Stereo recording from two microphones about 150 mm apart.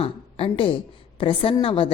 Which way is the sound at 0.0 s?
35° left (ahead or behind).